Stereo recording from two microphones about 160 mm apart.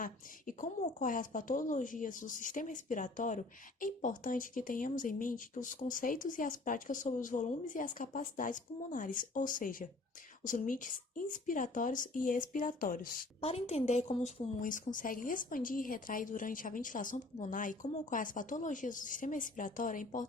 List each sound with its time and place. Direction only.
0.0 s a woman's voice: 55° left (ahead or behind)
13.4 s a woman's voice: 40° left (ahead or behind)
14.6 s a woman's voice: 55° left (ahead or behind)